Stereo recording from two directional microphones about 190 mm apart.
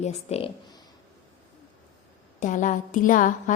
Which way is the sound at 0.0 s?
35° left (ahead or behind).